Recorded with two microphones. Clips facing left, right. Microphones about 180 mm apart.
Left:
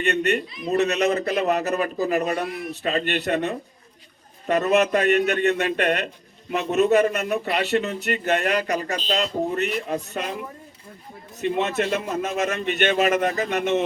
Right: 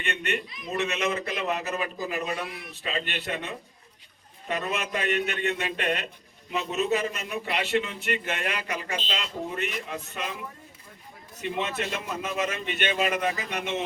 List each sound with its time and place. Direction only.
0.0 s speech: 40° left (ahead or behind)
11.3 s speech: 50° left (ahead or behind)